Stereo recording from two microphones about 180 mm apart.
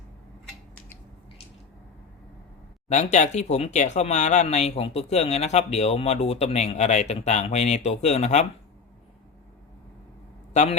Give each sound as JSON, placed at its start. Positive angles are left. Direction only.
{"t": 2.9, "sound": "speech", "side_deg": 40}
{"t": 10.5, "sound": "a man's voice", "side_deg": 40}